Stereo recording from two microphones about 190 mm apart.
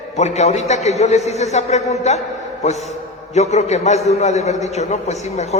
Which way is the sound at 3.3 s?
35° left (ahead or behind).